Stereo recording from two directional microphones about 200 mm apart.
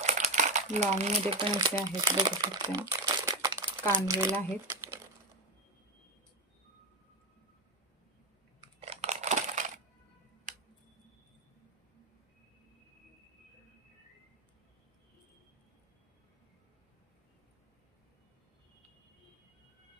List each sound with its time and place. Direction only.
0.0 s speech: 35° right (ahead or behind); by 5.0 s 15° right (ahead or behind)
8.7 s crushing: 30° right (ahead or behind)
10.5 s a sound: 40° right (ahead or behind)